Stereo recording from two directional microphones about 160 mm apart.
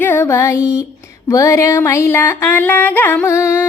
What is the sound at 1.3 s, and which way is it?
Music, 20° left (ahead or behind).